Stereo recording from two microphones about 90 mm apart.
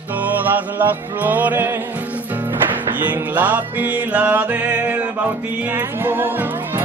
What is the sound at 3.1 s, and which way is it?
Music, 20° right (ahead or behind).